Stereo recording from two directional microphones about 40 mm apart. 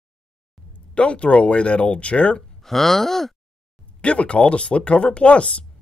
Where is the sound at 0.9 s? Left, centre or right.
Left.